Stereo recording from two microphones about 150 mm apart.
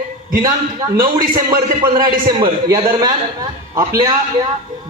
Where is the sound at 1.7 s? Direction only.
70° right (ahead or behind).